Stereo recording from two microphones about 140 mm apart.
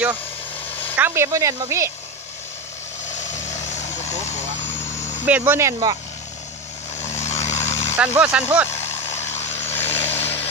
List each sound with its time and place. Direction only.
0.9 s speech: 15° right (ahead or behind)
3.2 s vehicle: 55° left (ahead or behind)
5.2 s speech: 15° right (ahead or behind)
7.0 s vehicle: 55° left (ahead or behind)
8.0 s speech: 10° right (ahead or behind)
8.6 s vehicle: 50° left (ahead or behind)
10.0 s vehicle: 15° left (ahead or behind)